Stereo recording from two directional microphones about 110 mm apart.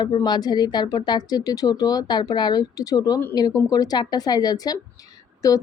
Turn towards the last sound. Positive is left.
turn(degrees=30)  # may be behind; listen again after turning